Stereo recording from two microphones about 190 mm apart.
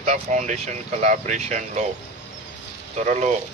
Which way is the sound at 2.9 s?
40° right (ahead or behind).